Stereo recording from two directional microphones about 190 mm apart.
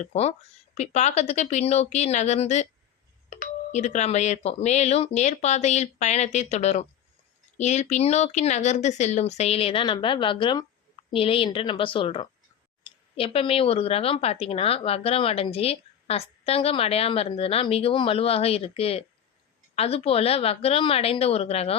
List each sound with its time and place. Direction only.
0.0 s speech: 35° left (ahead or behind)
3.7 s a woman's voice: 35° left (ahead or behind)